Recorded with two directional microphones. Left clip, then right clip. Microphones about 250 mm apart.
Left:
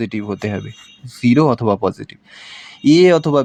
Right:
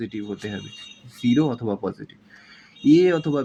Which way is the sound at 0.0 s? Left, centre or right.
Left.